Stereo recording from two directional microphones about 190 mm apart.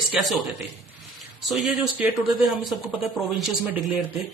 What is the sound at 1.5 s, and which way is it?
Speech, centre (ahead or behind).